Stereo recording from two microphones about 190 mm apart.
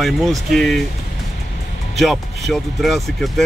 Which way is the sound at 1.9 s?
Centre (ahead or behind).